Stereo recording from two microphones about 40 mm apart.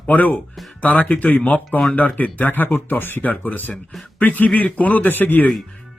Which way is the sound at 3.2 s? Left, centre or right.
Left.